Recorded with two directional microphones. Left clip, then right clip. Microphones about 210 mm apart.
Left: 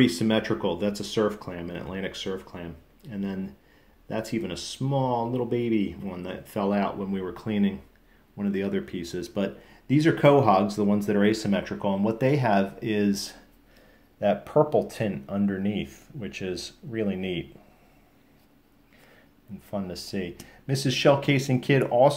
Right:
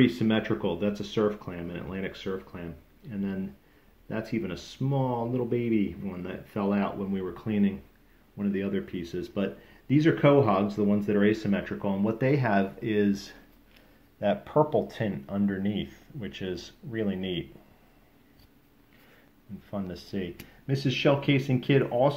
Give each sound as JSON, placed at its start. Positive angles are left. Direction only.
{"t": 0.0, "sound": "speech", "side_deg": 0}
{"t": 19.7, "sound": "speech", "side_deg": 0}